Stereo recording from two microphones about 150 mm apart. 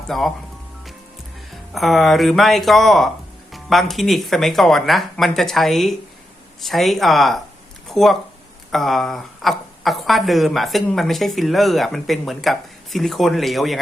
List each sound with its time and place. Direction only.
0.1 s a woman's voice: centre (ahead or behind)
1.7 s a woman's voice: centre (ahead or behind)